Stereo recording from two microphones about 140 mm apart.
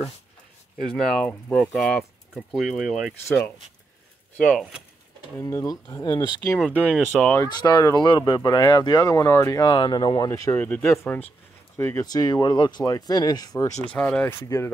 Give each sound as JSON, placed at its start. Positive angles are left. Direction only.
{"t": 0.8, "sound": "speech", "side_deg": 5}
{"t": 3.3, "sound": "speech", "side_deg": 15}
{"t": 4.4, "sound": "speech", "side_deg": 5}
{"t": 5.4, "sound": "speech", "side_deg": 20}
{"t": 7.1, "sound": "speech", "side_deg": 15}
{"t": 7.4, "sound": "speech", "side_deg": 30}
{"t": 10.6, "sound": "speech", "side_deg": 10}
{"t": 13.9, "sound": "speech", "side_deg": 10}